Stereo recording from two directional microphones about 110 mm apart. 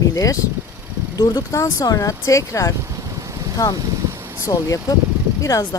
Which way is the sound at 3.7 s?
30° right (ahead or behind).